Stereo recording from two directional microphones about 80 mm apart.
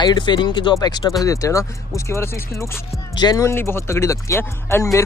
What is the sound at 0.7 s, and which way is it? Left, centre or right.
Speech, left.